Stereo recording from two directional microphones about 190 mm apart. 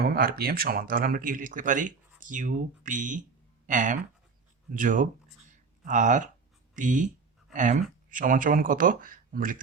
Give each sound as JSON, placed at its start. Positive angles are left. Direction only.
{"t": 0.0, "sound": "speech", "side_deg": -50}